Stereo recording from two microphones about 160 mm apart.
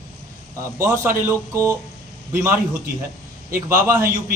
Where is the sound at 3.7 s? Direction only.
20° right (ahead or behind).